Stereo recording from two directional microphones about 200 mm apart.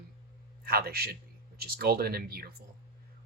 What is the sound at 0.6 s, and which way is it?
A man's voice, 50° right (ahead or behind).